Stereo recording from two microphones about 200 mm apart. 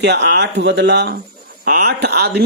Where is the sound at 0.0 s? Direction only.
60° right (ahead or behind).